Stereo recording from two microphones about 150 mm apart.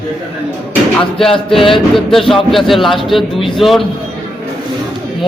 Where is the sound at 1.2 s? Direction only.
Centre (ahead or behind).